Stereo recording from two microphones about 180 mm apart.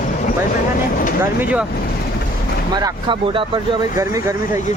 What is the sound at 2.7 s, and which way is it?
Speech, 25° right (ahead or behind).